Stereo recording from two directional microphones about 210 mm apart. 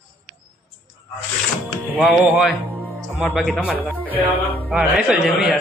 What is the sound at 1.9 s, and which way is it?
Speech, 5° left (ahead or behind).